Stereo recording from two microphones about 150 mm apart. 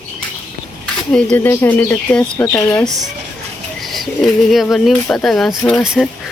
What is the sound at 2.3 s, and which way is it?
Speech, 20° left (ahead or behind).